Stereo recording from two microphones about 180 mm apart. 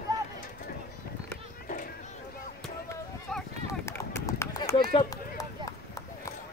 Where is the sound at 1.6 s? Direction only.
50° left (ahead or behind).